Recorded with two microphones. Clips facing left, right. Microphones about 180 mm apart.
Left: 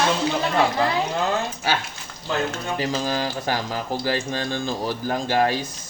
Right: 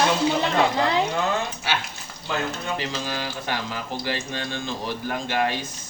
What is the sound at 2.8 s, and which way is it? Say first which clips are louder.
Speech: left 5 dB; 40° left (ahead or behind).